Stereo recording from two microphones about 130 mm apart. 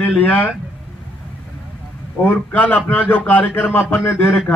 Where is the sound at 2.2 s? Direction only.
10° left (ahead or behind).